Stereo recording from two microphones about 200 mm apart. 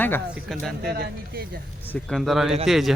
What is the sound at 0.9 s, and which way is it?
Speech, 50° right (ahead or behind).